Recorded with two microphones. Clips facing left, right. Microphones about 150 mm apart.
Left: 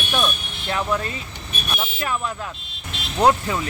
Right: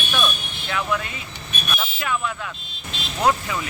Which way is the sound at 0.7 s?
35° left (ahead or behind).